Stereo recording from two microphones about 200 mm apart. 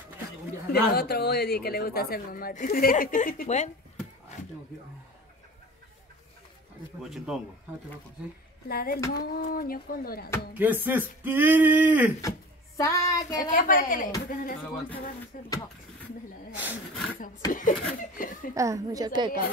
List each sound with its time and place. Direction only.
0.7 s a woman's voice: 55° left (ahead or behind); by 3.7 s 35° left (ahead or behind)
7.0 s speech: centre (ahead or behind)
8.6 s a woman's voice: 50° left (ahead or behind)
10.5 s speech: 10° right (ahead or behind)
12.2 s speech: 15° left (ahead or behind)
13.4 s a woman's voice: 45° left (ahead or behind)
17.5 s a woman's voice: 40° left (ahead or behind)
18.5 s speech: 15° right (ahead or behind)